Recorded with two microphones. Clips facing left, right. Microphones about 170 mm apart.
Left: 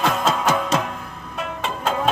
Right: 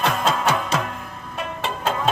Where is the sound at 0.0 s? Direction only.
Centre (ahead or behind).